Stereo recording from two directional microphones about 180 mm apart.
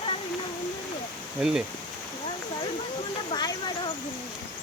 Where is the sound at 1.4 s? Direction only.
5° right (ahead or behind).